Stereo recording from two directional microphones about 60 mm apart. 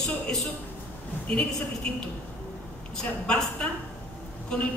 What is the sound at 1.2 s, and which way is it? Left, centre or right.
Speech, left.